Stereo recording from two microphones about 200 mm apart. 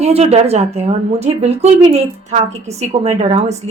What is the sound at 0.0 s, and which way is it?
A woman's voice, 30° right (ahead or behind).